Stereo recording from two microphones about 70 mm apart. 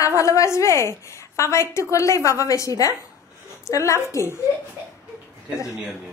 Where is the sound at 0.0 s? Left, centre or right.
Left.